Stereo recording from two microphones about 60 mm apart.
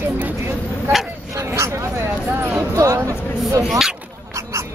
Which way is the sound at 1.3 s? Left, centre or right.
Right.